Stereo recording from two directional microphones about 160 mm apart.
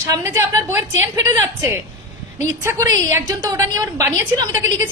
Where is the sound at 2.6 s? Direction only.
20° right (ahead or behind).